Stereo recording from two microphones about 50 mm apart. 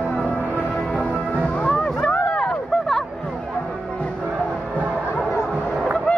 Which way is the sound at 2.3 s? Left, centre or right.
Centre.